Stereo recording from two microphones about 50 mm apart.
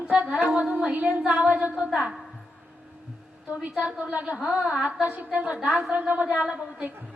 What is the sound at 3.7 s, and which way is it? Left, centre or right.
A woman's voice, right.